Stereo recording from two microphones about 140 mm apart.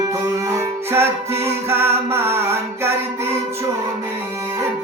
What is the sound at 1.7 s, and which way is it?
Music, 20° right (ahead or behind).